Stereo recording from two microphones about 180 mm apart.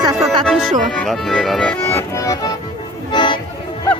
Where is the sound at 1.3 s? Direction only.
Centre (ahead or behind).